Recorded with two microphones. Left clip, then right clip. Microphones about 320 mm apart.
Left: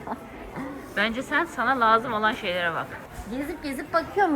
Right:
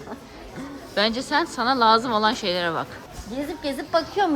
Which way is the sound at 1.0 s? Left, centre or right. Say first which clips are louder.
Right 3 dB; centre.